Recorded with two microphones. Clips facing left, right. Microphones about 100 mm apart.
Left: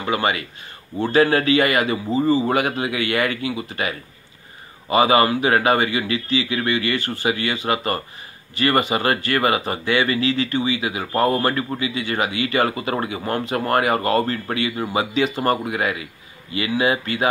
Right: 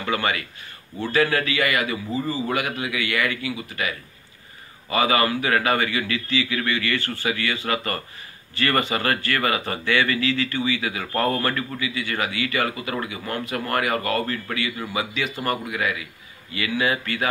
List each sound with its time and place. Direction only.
0.0 s speech: 20° left (ahead or behind)